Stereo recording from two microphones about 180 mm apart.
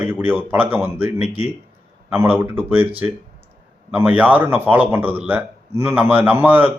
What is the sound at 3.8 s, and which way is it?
A man's voice, 10° right (ahead or behind).